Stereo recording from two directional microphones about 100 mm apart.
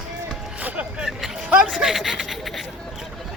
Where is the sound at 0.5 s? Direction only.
15° right (ahead or behind).